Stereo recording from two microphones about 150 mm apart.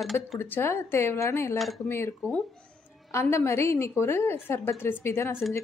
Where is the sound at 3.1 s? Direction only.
20° left (ahead or behind).